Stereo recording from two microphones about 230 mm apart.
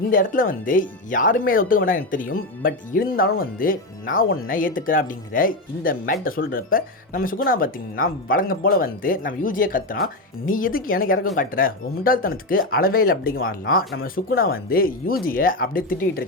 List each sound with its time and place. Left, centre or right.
0.1 s speech: left